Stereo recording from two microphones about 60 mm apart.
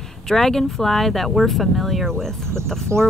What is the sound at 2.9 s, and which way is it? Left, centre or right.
Speech, right.